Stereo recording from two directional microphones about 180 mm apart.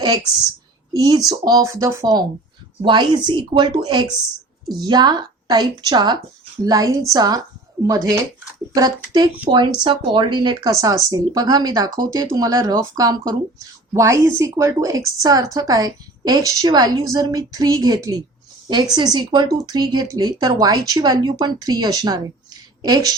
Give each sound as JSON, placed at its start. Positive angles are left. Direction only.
{"t": 0.9, "sound": "a woman's voice", "side_deg": -20}